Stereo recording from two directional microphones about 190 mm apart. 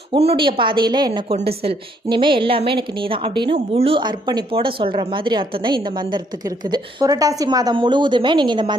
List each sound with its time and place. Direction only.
0.1 s a woman's voice: 30° right (ahead or behind)